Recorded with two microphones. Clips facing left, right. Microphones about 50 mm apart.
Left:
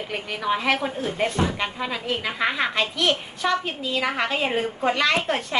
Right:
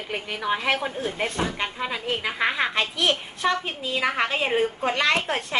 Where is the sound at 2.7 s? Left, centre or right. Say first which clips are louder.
Left 1 dB; right.